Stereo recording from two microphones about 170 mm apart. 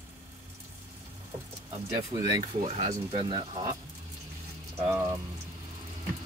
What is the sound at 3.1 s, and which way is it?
Speech, 30° right (ahead or behind).